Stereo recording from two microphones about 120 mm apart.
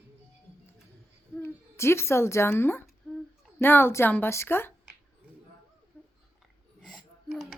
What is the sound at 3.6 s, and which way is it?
A woman's voice, 15° left (ahead or behind).